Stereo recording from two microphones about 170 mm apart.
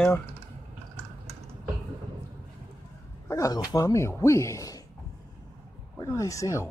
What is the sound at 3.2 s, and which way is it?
Speech, 20° left (ahead or behind).